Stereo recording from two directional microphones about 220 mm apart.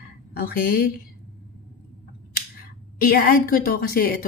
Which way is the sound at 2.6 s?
40° left (ahead or behind).